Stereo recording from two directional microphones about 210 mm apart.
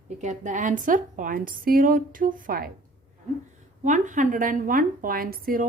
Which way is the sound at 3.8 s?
35° right (ahead or behind).